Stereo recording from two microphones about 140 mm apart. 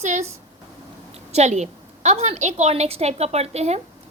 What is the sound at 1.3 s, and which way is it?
A woman's voice, 55° right (ahead or behind).